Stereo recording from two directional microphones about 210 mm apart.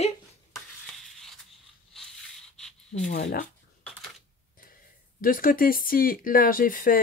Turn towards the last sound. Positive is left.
turn(degrees=40)  # may be behind; listen again after turning